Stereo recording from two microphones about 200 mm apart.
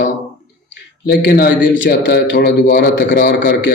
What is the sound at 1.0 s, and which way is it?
Speech, 55° left (ahead or behind).